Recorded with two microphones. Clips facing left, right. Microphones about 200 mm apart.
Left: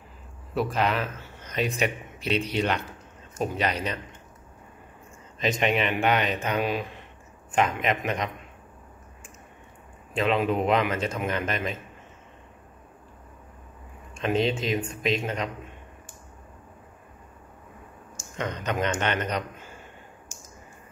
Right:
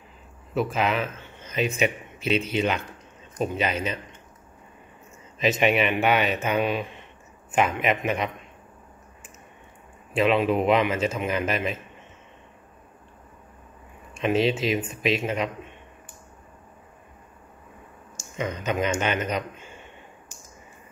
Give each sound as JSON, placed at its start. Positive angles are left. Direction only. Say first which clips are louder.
{"t": 0.6, "sound": "a man's voice", "louder": "right 1 dB", "side_deg": 0}
{"t": 5.4, "sound": "a man's voice", "louder": "right 3 dB", "side_deg": -5}
{"t": 10.1, "sound": "a man's voice", "louder": "right 3 dB", "side_deg": -5}
{"t": 14.1, "sound": "a man's voice", "louder": "right 2 dB", "side_deg": -5}
{"t": 18.3, "sound": "a man's voice", "louder": "right 2 dB", "side_deg": -5}